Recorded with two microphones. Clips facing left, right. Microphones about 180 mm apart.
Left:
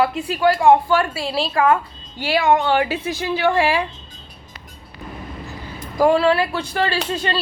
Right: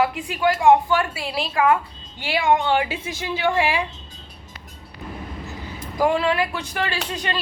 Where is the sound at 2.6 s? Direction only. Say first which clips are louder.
Left 3 dB; 20° right (ahead or behind).